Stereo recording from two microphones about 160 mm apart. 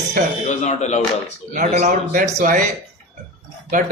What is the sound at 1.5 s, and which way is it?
A man's voice, 50° right (ahead or behind).